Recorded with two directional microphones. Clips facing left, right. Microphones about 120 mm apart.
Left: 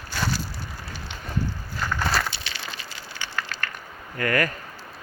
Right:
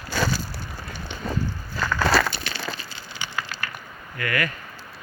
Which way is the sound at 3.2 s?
10° right (ahead or behind).